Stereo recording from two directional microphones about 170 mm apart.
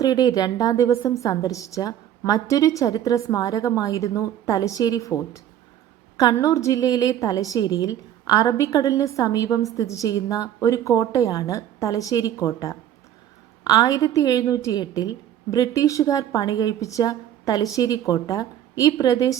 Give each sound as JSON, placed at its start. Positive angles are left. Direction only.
{"t": 0.0, "sound": "a woman's voice", "side_deg": 20}